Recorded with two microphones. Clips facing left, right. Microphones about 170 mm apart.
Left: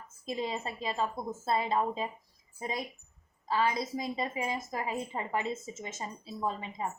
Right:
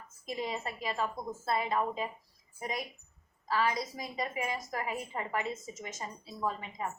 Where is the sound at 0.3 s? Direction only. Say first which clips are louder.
Left 2 dB; 25° left (ahead or behind).